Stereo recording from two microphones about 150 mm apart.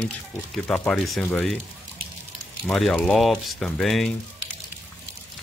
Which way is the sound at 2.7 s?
5° left (ahead or behind).